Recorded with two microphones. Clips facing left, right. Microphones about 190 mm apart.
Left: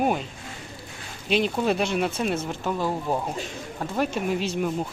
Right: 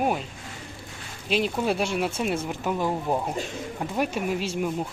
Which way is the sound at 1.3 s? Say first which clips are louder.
Left 2 dB; 5° right (ahead or behind).